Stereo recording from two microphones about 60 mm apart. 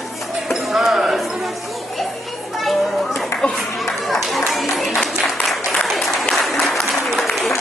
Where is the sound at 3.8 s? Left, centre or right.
Centre.